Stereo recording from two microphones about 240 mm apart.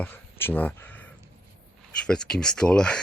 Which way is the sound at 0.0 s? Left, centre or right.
Centre.